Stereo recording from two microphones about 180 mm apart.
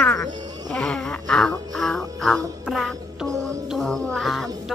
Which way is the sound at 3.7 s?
5° left (ahead or behind).